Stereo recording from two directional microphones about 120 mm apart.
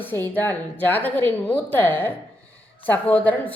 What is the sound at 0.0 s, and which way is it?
A woman's voice, 15° left (ahead or behind).